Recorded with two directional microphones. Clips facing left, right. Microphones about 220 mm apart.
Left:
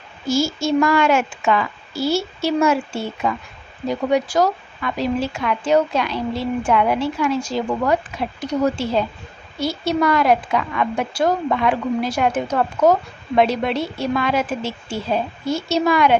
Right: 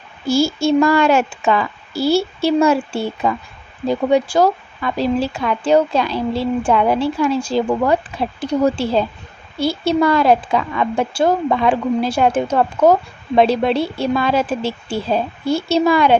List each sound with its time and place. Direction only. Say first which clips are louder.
0.3 s a woman's voice: right 4 dB; 30° right (ahead or behind)